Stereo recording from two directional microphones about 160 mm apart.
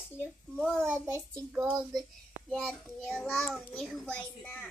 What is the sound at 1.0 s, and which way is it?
Speech, 15° right (ahead or behind).